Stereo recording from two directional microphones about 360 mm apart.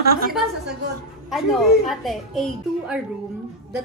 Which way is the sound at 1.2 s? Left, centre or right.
Centre.